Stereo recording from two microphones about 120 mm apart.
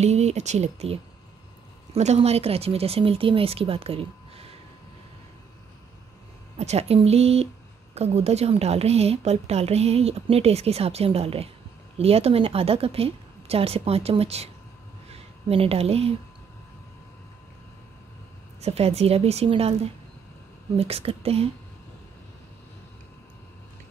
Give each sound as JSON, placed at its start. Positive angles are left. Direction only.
{"t": 0.0, "sound": "a woman's voice", "side_deg": -65}
{"t": 2.0, "sound": "a woman's voice", "side_deg": -65}
{"t": 6.6, "sound": "a woman's voice", "side_deg": -65}
{"t": 18.6, "sound": "a woman's voice", "side_deg": -60}